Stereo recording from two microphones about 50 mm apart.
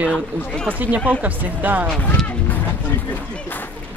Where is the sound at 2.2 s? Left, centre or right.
Left.